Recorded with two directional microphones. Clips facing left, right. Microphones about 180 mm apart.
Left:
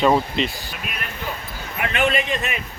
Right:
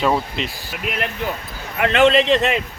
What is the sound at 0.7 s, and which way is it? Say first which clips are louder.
A man's voice: right 7 dB; 75° right (ahead or behind).